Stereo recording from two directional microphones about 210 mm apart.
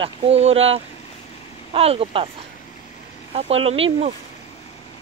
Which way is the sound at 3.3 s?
30° right (ahead or behind).